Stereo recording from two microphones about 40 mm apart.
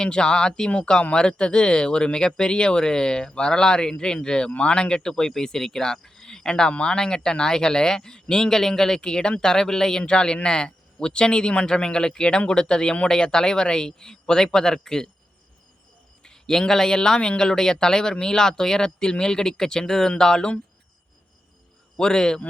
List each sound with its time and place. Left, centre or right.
0.0 s speech: left
16.2 s speech: centre
21.9 s speech: centre